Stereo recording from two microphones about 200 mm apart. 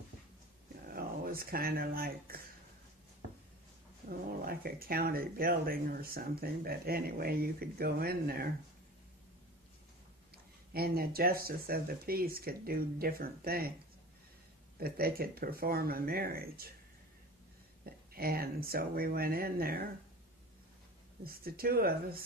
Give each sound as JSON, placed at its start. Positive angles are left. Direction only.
{"t": 0.9, "sound": "speech", "side_deg": -45}
{"t": 4.1, "sound": "speech", "side_deg": -50}
{"t": 10.7, "sound": "speech", "side_deg": -50}
{"t": 14.8, "sound": "speech", "side_deg": -50}
{"t": 17.8, "sound": "speech", "side_deg": -50}
{"t": 21.2, "sound": "speech", "side_deg": -50}